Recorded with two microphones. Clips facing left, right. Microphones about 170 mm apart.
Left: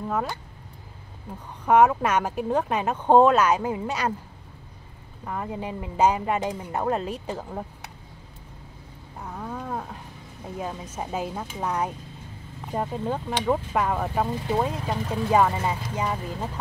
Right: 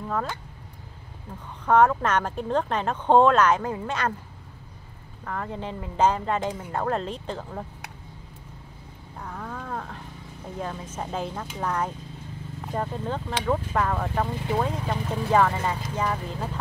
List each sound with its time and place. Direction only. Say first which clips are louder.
0.1 s speech: left 1 dB; 10° left (ahead or behind)
1.7 s speech: left 1 dB; 10° left (ahead or behind)
5.2 s speech: left 1 dB; 15° left (ahead or behind)
9.2 s a sound: left 2 dB; 10° left (ahead or behind)
11.0 s speech: left 1 dB; 10° left (ahead or behind)